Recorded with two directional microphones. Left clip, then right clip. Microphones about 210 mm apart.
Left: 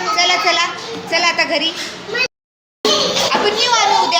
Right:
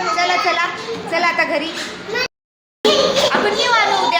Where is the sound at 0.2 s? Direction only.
10° left (ahead or behind).